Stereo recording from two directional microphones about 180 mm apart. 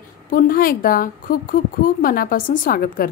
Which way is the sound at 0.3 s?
50° left (ahead or behind).